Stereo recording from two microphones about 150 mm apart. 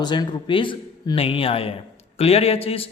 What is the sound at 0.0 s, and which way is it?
Speech, 30° left (ahead or behind).